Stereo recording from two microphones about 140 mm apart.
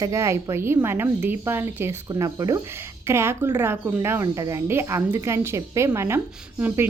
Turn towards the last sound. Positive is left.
turn(degrees=-15)  # may be behind; listen again after turning